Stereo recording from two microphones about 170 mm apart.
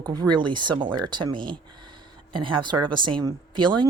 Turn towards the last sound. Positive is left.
turn(degrees=-25)  # may be behind; listen again after turning